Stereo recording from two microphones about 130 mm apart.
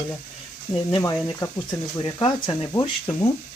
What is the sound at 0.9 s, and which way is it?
Speech, 40° left (ahead or behind).